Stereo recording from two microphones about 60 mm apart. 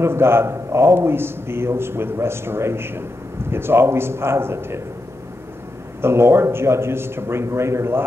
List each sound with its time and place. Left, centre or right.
0.0 s a man's voice: right
5.9 s a man's voice: right